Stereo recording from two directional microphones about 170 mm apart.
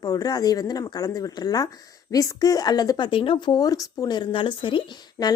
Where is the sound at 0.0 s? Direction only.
20° left (ahead or behind).